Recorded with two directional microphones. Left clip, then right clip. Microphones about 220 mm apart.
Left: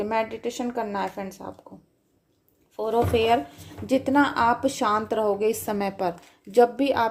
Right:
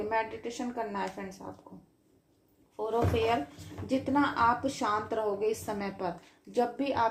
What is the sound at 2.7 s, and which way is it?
A woman's voice, 45° left (ahead or behind).